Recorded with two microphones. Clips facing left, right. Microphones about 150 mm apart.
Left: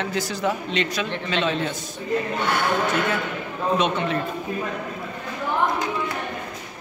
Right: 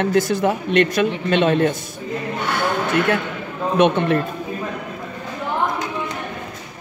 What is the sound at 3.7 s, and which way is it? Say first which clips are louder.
Speech: right 8 dB; 60° right (ahead or behind).